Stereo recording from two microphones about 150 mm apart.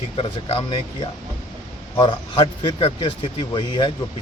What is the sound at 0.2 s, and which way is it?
Speech, 40° left (ahead or behind).